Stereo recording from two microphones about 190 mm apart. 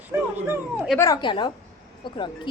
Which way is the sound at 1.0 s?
20° left (ahead or behind).